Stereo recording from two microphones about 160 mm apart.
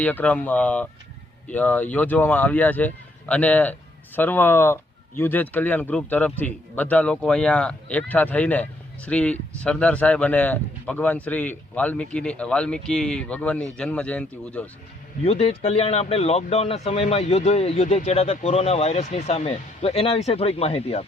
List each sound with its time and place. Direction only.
0.0 s speech: 10° left (ahead or behind)
15.2 s speech: 40° left (ahead or behind)